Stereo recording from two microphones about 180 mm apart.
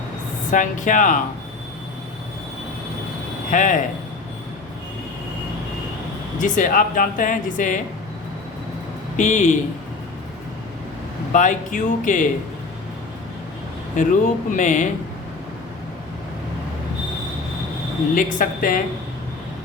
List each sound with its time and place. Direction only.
0.5 s speech: 45° left (ahead or behind)
3.5 s speech: 45° left (ahead or behind)
6.4 s speech: 50° left (ahead or behind)
9.1 s speech: 45° left (ahead or behind)
11.3 s speech: 45° left (ahead or behind)
13.9 s speech: 45° left (ahead or behind)
18.1 s speech: 45° left (ahead or behind)